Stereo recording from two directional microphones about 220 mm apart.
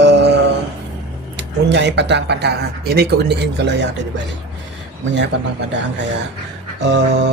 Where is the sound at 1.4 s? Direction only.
50° right (ahead or behind).